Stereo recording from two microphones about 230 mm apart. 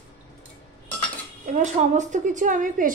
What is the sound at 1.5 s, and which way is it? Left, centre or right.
A woman's voice, right.